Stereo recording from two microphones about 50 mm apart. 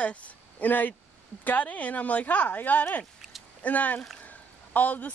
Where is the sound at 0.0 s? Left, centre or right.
Left.